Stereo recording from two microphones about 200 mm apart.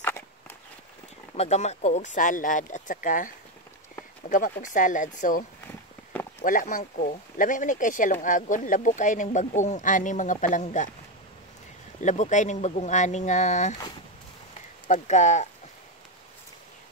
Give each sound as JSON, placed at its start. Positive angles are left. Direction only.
{"t": 1.3, "sound": "speech", "side_deg": 35}
{"t": 12.0, "sound": "speech", "side_deg": 35}
{"t": 14.9, "sound": "speech", "side_deg": 35}